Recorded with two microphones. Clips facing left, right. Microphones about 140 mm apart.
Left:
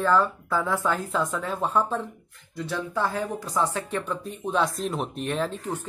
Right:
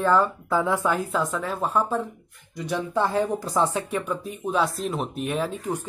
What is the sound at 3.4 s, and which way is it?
Speech, 35° right (ahead or behind).